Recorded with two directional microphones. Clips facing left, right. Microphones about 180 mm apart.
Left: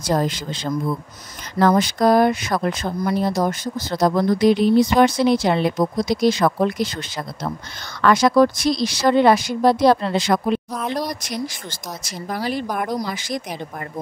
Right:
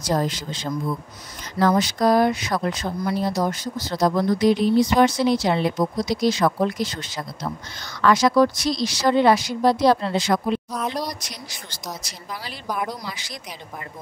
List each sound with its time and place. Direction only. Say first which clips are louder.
0.0 s speech: left 2 dB; 60° left (ahead or behind)
10.7 s speech: left 2 dB; centre (ahead or behind)
11.0 s speech: left 5 dB; 50° left (ahead or behind)